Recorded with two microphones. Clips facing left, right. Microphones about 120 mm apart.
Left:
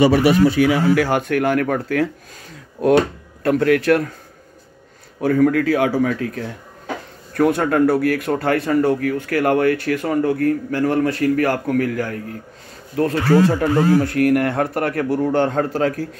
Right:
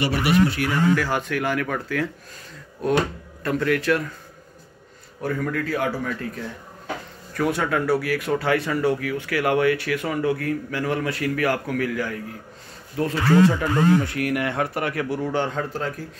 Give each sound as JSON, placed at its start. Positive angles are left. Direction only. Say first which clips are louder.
{"t": 0.9, "sound": "speech", "louder": "left 6 dB", "side_deg": 60}
{"t": 2.8, "sound": "speech", "louder": "left 7 dB", "side_deg": 70}
{"t": 3.4, "sound": "speech", "louder": "left 6 dB", "side_deg": 60}
{"t": 5.2, "sound": "speech", "louder": "left 10 dB", "side_deg": 65}
{"t": 7.3, "sound": "speech", "louder": "left 7 dB", "side_deg": 50}
{"t": 12.9, "sound": "speech", "louder": "left 6 dB", "side_deg": 60}
{"t": 13.3, "sound": "speech", "louder": "left 2 dB", "side_deg": 40}
{"t": 14.0, "sound": "speech", "louder": "left 8 dB", "side_deg": 50}